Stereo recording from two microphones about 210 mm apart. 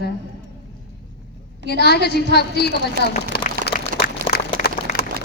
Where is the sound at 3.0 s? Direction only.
45° right (ahead or behind).